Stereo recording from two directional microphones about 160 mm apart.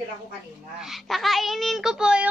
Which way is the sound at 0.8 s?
Centre (ahead or behind).